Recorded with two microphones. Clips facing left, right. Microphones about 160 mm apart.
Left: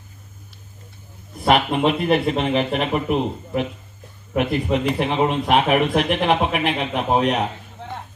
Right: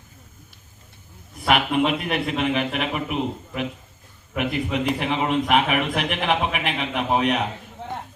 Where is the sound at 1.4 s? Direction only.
35° left (ahead or behind).